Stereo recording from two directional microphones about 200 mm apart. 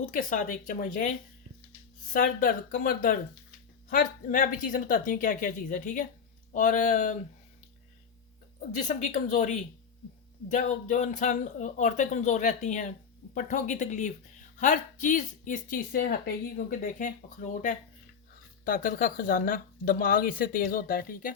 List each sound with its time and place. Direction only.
0.0 s speech: 40° left (ahead or behind)
2.1 s speech: 45° left (ahead or behind)
8.9 s speech: 35° left (ahead or behind)